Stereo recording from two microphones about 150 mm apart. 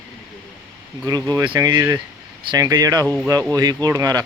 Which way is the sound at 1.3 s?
25° right (ahead or behind).